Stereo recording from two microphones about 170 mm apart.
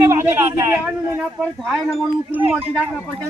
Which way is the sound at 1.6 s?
Centre (ahead or behind).